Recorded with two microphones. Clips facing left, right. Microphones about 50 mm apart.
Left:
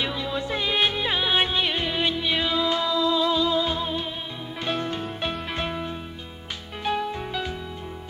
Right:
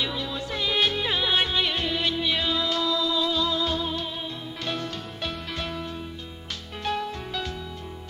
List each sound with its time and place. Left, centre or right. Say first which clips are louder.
0.0 s music: left 2 dB; left